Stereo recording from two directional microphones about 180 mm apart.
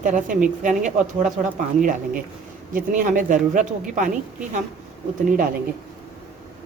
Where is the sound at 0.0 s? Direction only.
45° right (ahead or behind).